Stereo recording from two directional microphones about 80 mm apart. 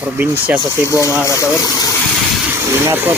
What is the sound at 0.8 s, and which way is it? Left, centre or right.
Speech, left.